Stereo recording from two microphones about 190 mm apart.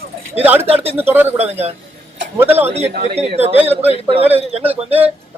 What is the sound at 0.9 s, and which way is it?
Speech, 10° right (ahead or behind).